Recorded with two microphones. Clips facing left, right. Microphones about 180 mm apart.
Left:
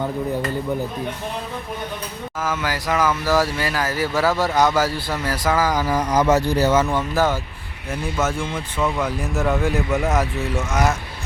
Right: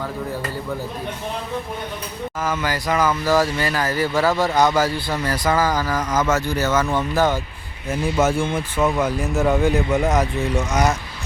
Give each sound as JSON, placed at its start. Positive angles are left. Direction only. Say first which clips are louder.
{"t": 2.4, "sound": "speech", "louder": "right 1 dB", "side_deg": 5}
{"t": 6.3, "sound": "speech", "louder": "left 3 dB", "side_deg": 35}
{"t": 6.9, "sound": "speech", "louder": "right 1 dB", "side_deg": 5}
{"t": 7.9, "sound": "speech", "louder": "right 4 dB", "side_deg": -10}